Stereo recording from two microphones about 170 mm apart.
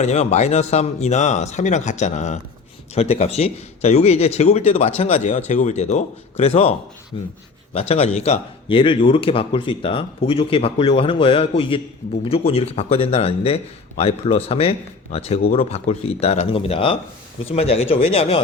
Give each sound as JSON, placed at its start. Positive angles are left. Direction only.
{"t": 0.0, "sound": "speech", "side_deg": 40}